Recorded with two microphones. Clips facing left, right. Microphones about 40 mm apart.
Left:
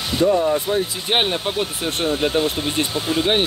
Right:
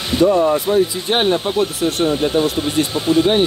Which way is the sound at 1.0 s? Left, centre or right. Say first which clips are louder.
Right 3 dB; centre.